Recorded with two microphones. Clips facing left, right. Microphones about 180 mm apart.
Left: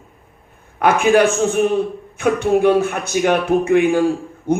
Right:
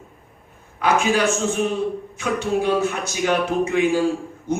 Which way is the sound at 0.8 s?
55° left (ahead or behind).